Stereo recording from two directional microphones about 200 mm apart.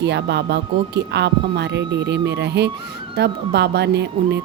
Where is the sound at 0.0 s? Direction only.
60° right (ahead or behind).